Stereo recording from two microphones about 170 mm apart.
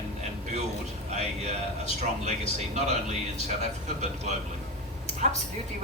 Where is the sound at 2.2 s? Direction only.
40° right (ahead or behind).